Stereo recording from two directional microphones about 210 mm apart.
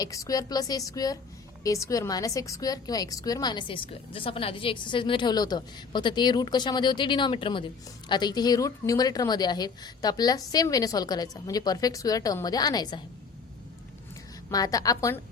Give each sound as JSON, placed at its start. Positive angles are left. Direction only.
{"t": 0.0, "sound": "a woman's voice", "side_deg": 15}
{"t": 14.5, "sound": "a woman's voice", "side_deg": 15}